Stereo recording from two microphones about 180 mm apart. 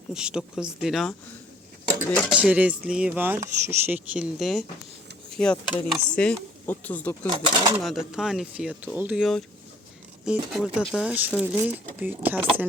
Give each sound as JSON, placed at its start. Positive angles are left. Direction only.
{"t": 0.1, "sound": "speech", "side_deg": -5}
{"t": 2.3, "sound": "speech", "side_deg": -10}
{"t": 7.3, "sound": "speech", "side_deg": -30}
{"t": 7.8, "sound": "speech", "side_deg": 0}